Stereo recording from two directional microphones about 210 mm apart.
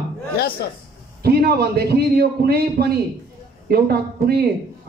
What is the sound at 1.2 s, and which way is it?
A man's voice, 50° right (ahead or behind).